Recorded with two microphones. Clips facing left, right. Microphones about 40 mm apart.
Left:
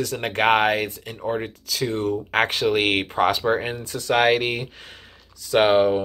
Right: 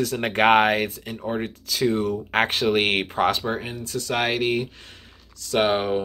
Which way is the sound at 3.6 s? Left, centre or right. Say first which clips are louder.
Left 4 dB; left.